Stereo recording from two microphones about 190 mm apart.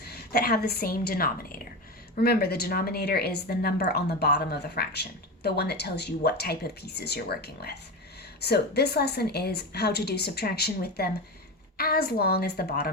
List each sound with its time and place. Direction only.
0.0 s a woman's voice: 55° left (ahead or behind)